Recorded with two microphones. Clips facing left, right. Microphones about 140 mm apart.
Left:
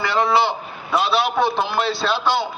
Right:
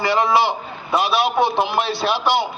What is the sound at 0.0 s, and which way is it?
A man's voice, 20° right (ahead or behind).